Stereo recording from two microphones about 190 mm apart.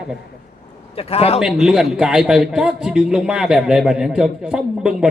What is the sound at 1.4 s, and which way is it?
A man's voice, centre (ahead or behind).